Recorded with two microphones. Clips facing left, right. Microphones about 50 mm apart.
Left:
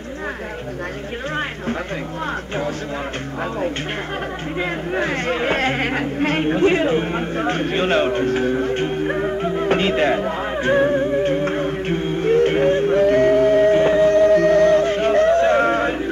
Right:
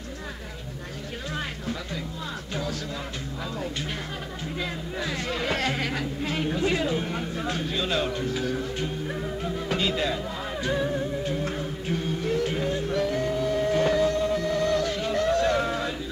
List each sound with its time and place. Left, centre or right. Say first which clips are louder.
4.6 s speech: left 10 dB; left
13.7 s music: left 8 dB; left
14.1 s music: left 12 dB; left
14.8 s yodeling: left 10 dB; left